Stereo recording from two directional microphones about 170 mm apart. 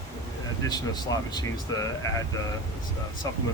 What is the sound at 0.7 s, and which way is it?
Speech, 25° left (ahead or behind).